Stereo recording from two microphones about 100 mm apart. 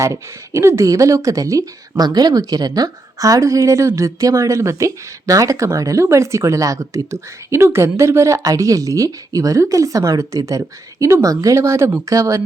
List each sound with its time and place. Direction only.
0.0 s speech: 30° right (ahead or behind)